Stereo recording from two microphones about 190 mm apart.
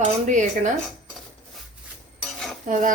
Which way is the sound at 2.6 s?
45° right (ahead or behind).